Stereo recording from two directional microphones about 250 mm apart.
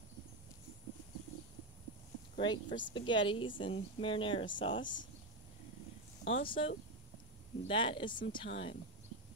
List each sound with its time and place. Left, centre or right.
2.3 s a woman's voice: centre
6.2 s a woman's voice: left